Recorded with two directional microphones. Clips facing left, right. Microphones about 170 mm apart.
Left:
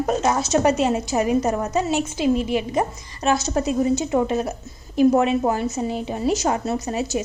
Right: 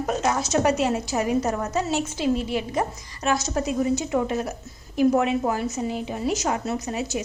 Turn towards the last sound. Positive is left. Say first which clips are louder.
# left 3 dB
turn(degrees=30)  # may be behind; listen again after turning